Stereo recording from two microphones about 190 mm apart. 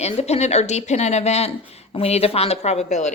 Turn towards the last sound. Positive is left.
turn(degrees=35)  # may be behind; listen again after turning